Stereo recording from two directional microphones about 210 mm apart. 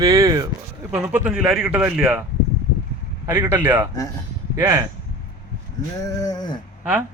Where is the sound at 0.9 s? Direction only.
10° right (ahead or behind).